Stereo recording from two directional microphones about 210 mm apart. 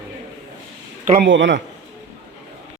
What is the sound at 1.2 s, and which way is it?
Speech, 60° right (ahead or behind).